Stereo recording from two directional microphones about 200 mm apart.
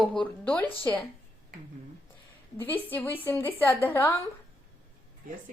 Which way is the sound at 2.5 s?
10° left (ahead or behind).